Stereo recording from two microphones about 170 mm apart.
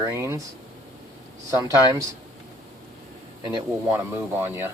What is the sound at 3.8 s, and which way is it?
Speech, 10° right (ahead or behind).